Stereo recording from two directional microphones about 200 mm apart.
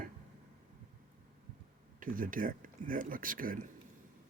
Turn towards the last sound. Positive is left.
turn(degrees=-45)  # may be behind; listen again after turning